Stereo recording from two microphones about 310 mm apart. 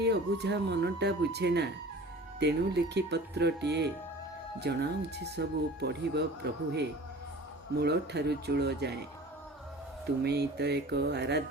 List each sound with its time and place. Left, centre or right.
0.0 s speech: right
10.2 s speech: right